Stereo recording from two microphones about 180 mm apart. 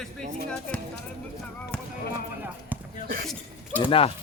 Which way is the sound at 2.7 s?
10° right (ahead or behind).